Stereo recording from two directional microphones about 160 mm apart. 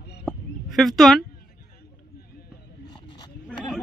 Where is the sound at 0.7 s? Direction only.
Centre (ahead or behind).